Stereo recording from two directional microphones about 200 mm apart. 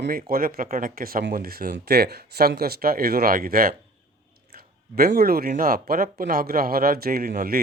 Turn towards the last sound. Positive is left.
turn(degrees=-45)  # may be behind; listen again after turning